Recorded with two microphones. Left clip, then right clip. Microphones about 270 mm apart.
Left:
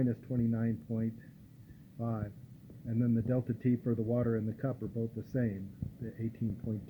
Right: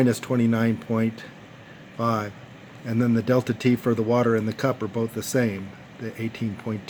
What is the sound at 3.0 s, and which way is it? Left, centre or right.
Speech, right.